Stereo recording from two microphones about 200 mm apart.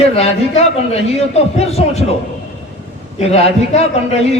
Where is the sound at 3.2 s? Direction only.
30° left (ahead or behind).